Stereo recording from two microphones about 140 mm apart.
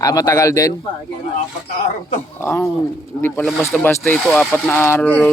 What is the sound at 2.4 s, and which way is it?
A man's voice, 20° left (ahead or behind).